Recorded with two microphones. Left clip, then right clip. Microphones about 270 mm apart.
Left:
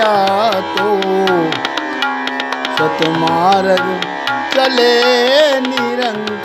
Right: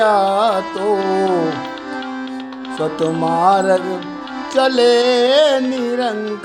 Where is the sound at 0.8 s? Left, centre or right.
Left.